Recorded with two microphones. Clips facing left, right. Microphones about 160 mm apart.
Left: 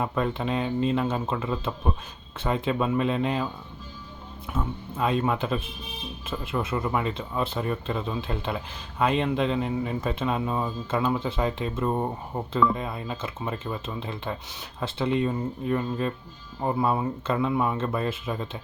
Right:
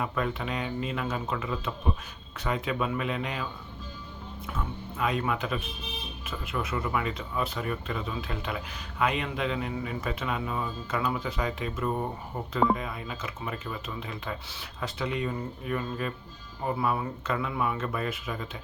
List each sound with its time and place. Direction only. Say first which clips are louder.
0.0 s speech: left 4 dB; 30° left (ahead or behind)
4.5 s speech: left 5 dB; 30° left (ahead or behind)